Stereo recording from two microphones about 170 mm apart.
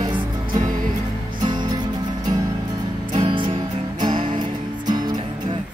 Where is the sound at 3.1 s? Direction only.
30° right (ahead or behind).